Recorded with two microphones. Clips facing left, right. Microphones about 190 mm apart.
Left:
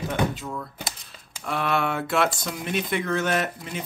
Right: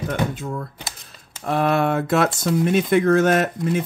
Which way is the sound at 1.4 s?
40° right (ahead or behind).